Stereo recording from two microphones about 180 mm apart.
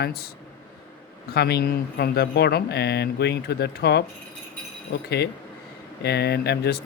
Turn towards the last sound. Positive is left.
turn(degrees=65)  # may be behind; listen again after turning